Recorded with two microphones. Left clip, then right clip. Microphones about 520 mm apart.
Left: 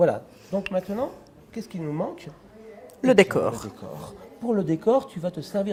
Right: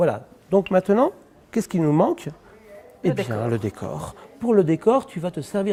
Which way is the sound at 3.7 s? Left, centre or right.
Right.